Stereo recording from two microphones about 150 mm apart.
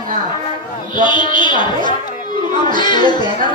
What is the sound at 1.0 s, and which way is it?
Speech, 30° left (ahead or behind).